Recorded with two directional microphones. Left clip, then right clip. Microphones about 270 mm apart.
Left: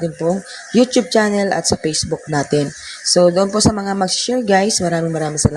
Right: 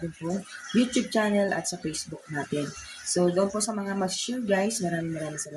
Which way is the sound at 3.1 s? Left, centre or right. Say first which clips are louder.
Left 12 dB; left.